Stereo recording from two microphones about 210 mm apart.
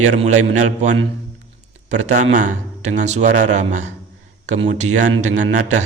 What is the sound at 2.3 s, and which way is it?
Speech, 35° right (ahead or behind).